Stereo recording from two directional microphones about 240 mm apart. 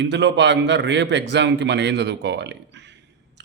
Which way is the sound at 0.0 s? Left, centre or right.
Right.